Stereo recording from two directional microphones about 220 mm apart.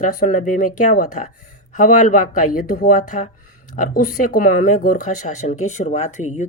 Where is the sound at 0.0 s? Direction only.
35° left (ahead or behind).